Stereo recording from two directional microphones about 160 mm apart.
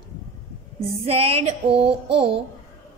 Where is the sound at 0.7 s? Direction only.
35° right (ahead or behind).